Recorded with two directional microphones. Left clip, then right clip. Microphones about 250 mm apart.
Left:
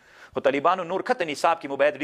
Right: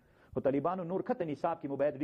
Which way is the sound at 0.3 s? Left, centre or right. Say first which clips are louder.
Left 10 dB; centre.